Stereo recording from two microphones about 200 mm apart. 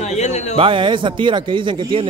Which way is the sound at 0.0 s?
35° left (ahead or behind).